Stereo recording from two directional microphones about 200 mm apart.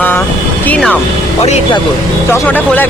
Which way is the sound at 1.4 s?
30° left (ahead or behind).